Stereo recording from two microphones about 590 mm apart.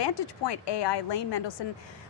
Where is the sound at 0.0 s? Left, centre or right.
Left.